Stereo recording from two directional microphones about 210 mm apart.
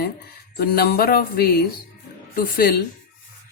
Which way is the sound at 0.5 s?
45° left (ahead or behind).